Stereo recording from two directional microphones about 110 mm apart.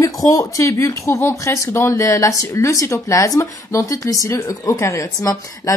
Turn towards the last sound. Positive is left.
turn(degrees=30)  # may be behind; listen again after turning